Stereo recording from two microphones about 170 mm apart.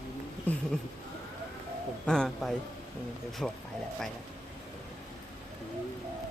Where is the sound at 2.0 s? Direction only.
5° left (ahead or behind).